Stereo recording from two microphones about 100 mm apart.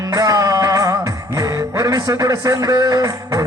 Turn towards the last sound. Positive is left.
turn(degrees=-35)  # may be behind; listen again after turning